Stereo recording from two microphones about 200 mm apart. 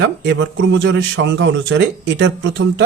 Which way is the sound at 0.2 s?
70° right (ahead or behind).